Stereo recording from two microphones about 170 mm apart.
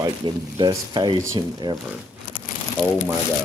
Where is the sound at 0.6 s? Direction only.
25° right (ahead or behind).